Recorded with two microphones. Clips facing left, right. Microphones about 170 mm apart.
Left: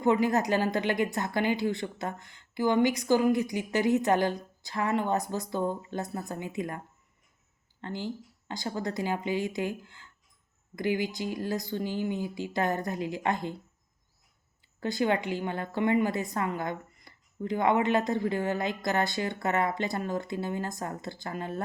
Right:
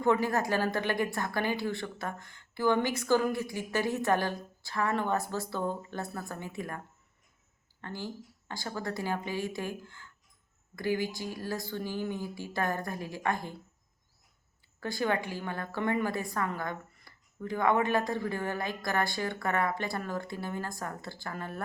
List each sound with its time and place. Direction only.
0.0 s speech: 15° left (ahead or behind)
10.8 s speech: 20° left (ahead or behind)
14.8 s speech: 20° left (ahead or behind)